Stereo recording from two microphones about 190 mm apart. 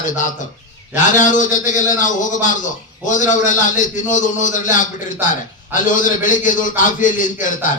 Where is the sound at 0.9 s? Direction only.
40° left (ahead or behind).